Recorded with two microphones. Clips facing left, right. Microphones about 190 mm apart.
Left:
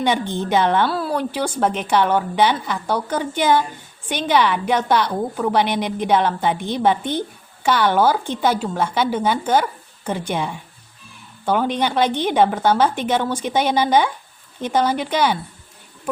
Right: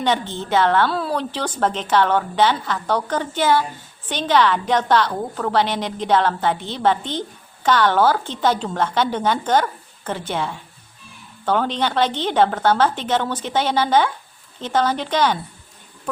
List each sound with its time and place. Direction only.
0.0 s a woman's voice: 15° left (ahead or behind)
0.9 s a woman's voice: 5° left (ahead or behind)